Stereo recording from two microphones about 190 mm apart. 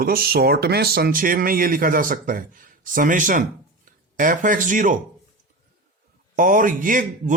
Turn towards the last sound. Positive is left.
turn(degrees=-45)  # may be behind; listen again after turning